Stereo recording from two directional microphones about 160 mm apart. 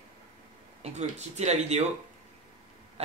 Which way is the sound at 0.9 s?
45° right (ahead or behind).